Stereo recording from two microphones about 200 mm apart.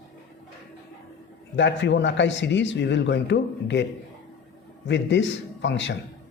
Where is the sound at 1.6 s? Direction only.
65° left (ahead or behind).